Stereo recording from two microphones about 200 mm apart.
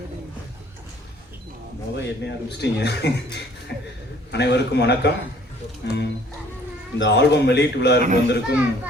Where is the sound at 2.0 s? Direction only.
60° left (ahead or behind).